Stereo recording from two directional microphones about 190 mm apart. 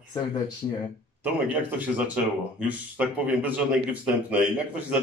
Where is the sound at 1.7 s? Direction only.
5° right (ahead or behind).